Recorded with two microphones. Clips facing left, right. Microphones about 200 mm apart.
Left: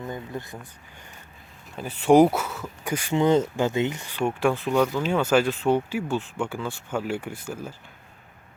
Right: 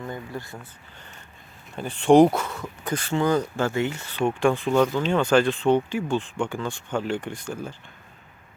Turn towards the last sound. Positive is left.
turn(degrees=5)  # may be behind; listen again after turning